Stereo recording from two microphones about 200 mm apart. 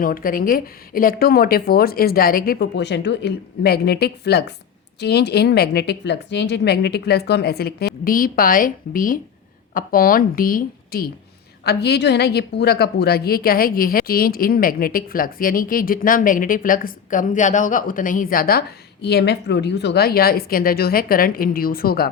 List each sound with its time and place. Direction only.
0.0 s a woman's voice: 45° left (ahead or behind)